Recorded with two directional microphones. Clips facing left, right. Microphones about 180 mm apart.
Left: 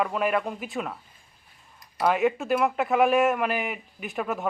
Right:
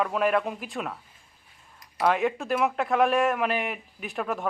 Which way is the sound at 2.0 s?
Centre (ahead or behind).